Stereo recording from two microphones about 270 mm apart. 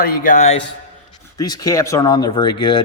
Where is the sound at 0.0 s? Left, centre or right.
Left.